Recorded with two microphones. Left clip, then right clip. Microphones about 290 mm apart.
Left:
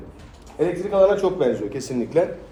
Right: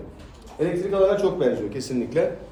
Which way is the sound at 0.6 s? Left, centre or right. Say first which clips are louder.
Left 3 dB; left.